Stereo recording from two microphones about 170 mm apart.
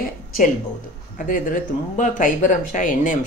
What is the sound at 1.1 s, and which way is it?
A woman's voice, 50° left (ahead or behind).